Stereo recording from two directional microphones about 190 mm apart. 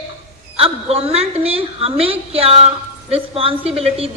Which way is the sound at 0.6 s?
30° right (ahead or behind).